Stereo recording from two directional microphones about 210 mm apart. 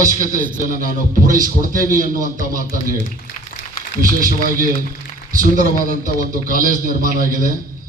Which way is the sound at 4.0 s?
40° right (ahead or behind).